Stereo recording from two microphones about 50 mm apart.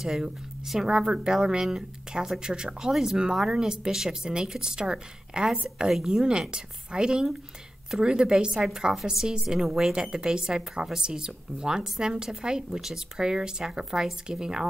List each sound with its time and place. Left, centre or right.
0.0 s a woman's voice: centre